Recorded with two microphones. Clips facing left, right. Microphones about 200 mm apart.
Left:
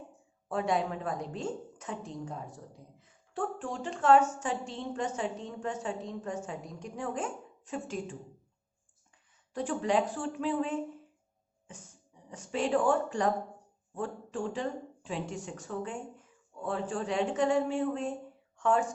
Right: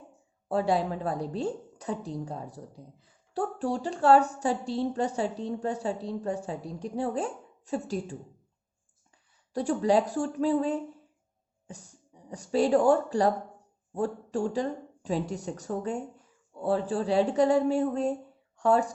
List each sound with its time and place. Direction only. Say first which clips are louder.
0.4 s a woman's voice: right 4 dB; 35° right (ahead or behind)
9.5 s a woman's voice: right 5 dB; 35° right (ahead or behind)
12.3 s a woman's voice: right 6 dB; 35° right (ahead or behind)